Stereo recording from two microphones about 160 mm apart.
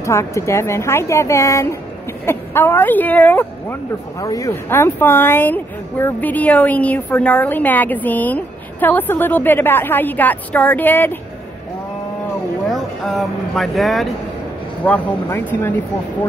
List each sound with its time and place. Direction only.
0.0 s speech: 15° left (ahead or behind)
12.7 s speech: centre (ahead or behind)
14.9 s speech: 10° left (ahead or behind)